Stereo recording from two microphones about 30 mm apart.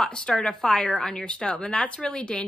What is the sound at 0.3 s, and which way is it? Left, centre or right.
A woman's voice, left.